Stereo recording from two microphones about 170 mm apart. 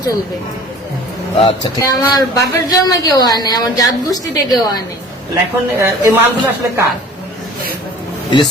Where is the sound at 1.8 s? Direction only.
20° left (ahead or behind).